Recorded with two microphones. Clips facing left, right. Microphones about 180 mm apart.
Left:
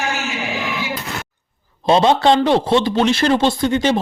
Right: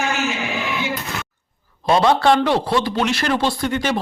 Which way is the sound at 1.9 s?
25° left (ahead or behind).